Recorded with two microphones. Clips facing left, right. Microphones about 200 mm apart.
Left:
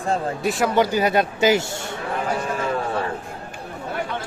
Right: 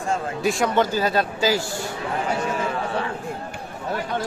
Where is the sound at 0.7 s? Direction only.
15° left (ahead or behind).